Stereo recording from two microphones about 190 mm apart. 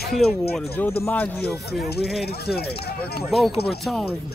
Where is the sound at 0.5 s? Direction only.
10° left (ahead or behind).